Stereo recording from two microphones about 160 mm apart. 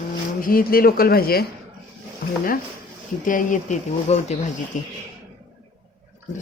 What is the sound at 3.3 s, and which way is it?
Speech, 55° left (ahead or behind).